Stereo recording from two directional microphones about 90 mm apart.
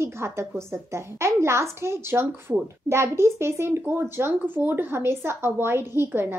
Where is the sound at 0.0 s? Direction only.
30° right (ahead or behind).